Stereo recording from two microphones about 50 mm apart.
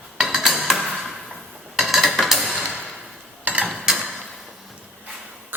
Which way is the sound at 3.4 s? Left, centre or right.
Right.